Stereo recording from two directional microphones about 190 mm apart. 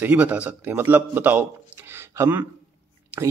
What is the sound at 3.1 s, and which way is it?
Whispering, 5° right (ahead or behind).